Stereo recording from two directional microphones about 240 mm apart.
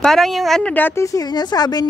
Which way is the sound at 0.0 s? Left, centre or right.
Centre.